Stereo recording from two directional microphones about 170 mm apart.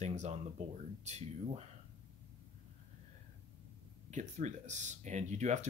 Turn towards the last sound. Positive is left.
turn(degrees=-45)  # may be behind; listen again after turning